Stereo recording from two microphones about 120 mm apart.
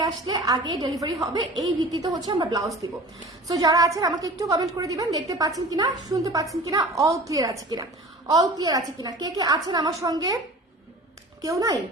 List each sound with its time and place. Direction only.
0.0 s a woman's voice: 30° right (ahead or behind)
11.4 s a woman's voice: 30° right (ahead or behind)